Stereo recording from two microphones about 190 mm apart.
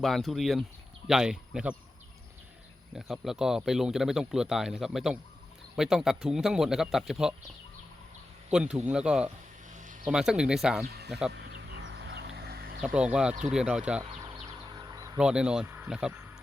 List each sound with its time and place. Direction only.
0.0 s speech: centre (ahead or behind)
2.9 s speech: centre (ahead or behind)
8.4 s speech: 5° right (ahead or behind)
9.6 s a sound: 40° right (ahead or behind)
10.1 s speech: 5° right (ahead or behind)
10.8 s speech: 55° right (ahead or behind)
11.3 s a sound: 60° right (ahead or behind)
12.8 s speech: 5° right (ahead or behind)
14.1 s a sound: 25° right (ahead or behind)
15.2 s speech: 5° right (ahead or behind)